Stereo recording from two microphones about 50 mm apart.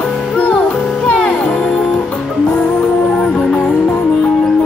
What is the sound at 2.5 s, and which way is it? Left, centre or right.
Music, centre.